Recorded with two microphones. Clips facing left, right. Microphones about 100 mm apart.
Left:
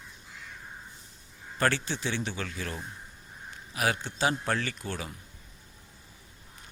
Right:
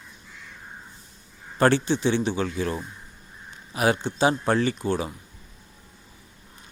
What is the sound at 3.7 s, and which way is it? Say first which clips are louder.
Speech: right 7 dB; 25° right (ahead or behind).